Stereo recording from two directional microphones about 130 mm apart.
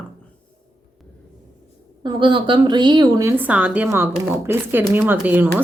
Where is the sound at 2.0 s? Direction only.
40° right (ahead or behind); by 5.5 s 15° right (ahead or behind).